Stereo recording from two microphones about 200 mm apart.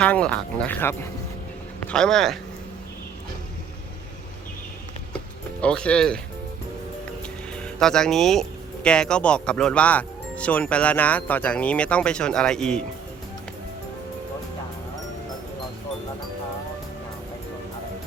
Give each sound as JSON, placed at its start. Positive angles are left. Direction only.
{"t": 0.0, "sound": "speech", "side_deg": 5}
{"t": 5.5, "sound": "speech", "side_deg": 5}
{"t": 7.5, "sound": "speech", "side_deg": 5}